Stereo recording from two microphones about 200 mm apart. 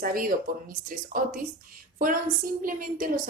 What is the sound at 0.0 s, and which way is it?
A woman's voice, 45° right (ahead or behind).